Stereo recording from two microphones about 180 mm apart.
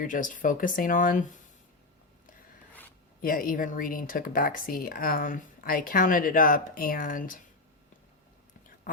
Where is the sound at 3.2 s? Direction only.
50° left (ahead or behind).